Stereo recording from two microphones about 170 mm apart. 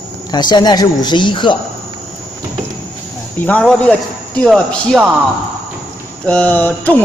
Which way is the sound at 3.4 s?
5° left (ahead or behind).